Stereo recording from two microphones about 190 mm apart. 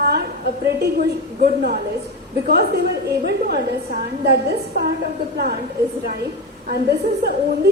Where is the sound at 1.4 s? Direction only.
50° right (ahead or behind).